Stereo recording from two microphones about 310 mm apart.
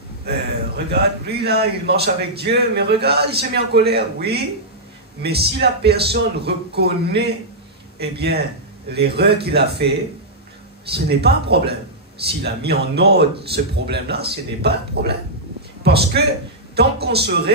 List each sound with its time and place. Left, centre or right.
0.2 s a man's voice: right
11.1 s a man's voice: right